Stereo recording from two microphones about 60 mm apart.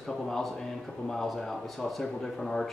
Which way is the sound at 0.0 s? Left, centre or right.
Centre.